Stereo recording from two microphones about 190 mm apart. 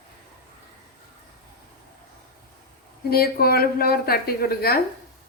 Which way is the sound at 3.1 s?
55° left (ahead or behind).